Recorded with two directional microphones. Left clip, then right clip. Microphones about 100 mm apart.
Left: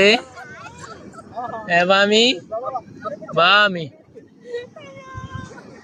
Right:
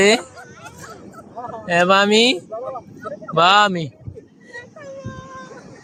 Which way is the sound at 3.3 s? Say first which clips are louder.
Right 1 dB; 90° right.